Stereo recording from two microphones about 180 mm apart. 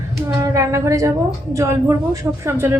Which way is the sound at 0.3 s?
15° right (ahead or behind).